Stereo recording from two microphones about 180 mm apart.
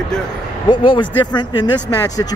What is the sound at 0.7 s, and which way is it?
Speech, 25° left (ahead or behind).